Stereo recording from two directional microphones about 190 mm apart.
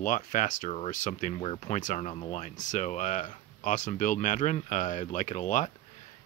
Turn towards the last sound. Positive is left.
turn(degrees=40)  # may be behind; listen again after turning